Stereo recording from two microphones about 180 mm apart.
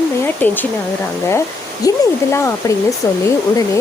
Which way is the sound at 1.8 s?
20° left (ahead or behind).